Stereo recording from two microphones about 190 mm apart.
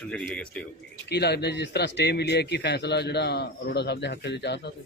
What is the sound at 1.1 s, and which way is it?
A man's voice, 60° left (ahead or behind).